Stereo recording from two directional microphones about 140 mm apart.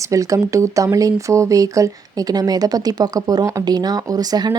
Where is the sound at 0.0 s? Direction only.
25° right (ahead or behind).